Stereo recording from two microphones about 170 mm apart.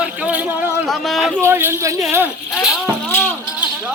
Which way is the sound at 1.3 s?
15° right (ahead or behind).